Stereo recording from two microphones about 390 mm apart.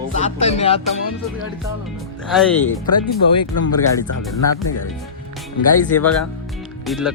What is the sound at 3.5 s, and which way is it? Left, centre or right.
Music, left.